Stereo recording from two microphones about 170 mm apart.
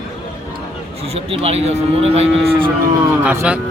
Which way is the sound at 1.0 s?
35° right (ahead or behind).